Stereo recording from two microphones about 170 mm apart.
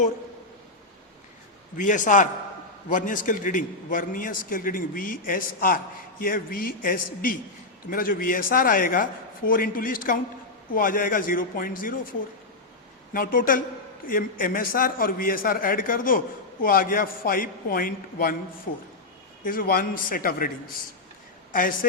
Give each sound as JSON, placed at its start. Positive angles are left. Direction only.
{"t": 1.7, "sound": "a man's voice", "side_deg": 50}
{"t": 13.1, "sound": "a man's voice", "side_deg": 55}
{"t": 19.5, "sound": "a man's voice", "side_deg": 55}
{"t": 21.5, "sound": "a man's voice", "side_deg": 55}